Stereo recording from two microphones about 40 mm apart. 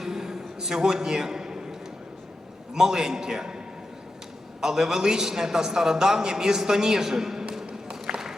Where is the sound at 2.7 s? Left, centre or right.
Centre.